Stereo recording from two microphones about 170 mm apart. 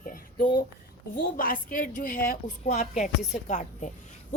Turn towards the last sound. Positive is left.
turn(degrees=45)  # may be behind; listen again after turning